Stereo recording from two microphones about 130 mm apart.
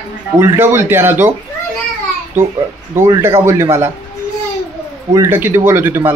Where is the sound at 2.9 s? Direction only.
20° right (ahead or behind).